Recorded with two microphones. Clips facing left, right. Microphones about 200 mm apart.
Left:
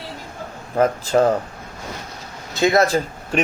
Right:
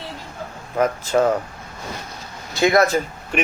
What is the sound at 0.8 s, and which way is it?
Speech, 30° left (ahead or behind).